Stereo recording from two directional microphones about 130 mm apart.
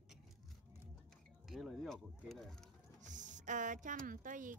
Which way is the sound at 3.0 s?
70° right (ahead or behind).